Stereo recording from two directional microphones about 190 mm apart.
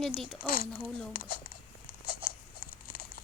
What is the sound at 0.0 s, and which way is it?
Speech, 5° left (ahead or behind).